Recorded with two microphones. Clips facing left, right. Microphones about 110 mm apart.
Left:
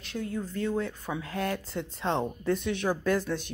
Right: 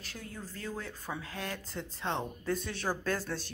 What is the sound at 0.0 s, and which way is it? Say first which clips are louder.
A woman's voice: left 11 dB; 25° left (ahead or behind).